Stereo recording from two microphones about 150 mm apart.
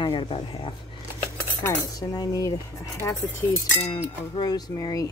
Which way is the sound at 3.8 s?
30° left (ahead or behind).